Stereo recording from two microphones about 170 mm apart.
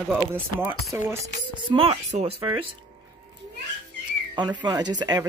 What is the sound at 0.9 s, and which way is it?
Speech, 15° right (ahead or behind).